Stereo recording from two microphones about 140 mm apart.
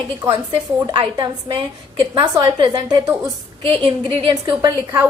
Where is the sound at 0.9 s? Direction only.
35° right (ahead or behind).